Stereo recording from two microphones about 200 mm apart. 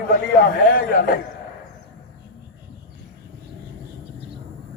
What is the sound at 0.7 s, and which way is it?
Speech, 45° left (ahead or behind).